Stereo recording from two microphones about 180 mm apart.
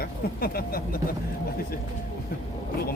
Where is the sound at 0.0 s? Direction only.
55° left (ahead or behind).